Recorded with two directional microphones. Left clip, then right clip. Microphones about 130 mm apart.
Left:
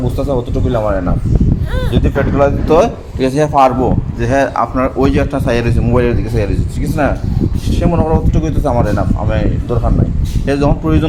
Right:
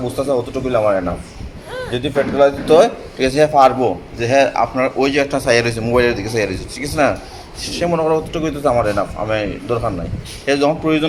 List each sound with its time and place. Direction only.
0.0 s speech: 15° left (ahead or behind)
2.4 s a man's voice: 25° left (ahead or behind)
5.5 s speech: 15° left (ahead or behind)
7.8 s speech: 20° left (ahead or behind)
10.4 s a man's voice: 25° left (ahead or behind)